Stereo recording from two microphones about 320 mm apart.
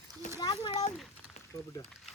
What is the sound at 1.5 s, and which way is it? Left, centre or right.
Speech, centre.